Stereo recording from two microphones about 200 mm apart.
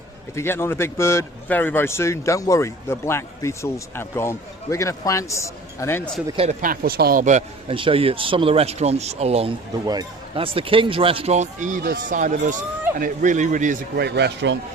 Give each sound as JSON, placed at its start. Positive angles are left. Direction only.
{"t": 0.3, "sound": "speech", "side_deg": 10}
{"t": 6.2, "sound": "speech", "side_deg": -30}
{"t": 9.8, "sound": "speech", "side_deg": -20}
{"t": 14.0, "sound": "speech", "side_deg": -55}